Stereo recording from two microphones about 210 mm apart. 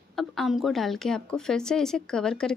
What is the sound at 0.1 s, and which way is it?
Speech, centre (ahead or behind).